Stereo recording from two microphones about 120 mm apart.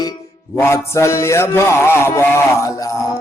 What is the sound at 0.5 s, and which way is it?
Music, 20° left (ahead or behind).